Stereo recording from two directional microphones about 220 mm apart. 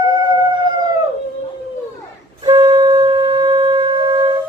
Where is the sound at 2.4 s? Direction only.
20° right (ahead or behind).